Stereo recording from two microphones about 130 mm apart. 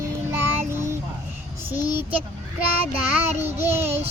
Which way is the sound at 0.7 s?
20° right (ahead or behind).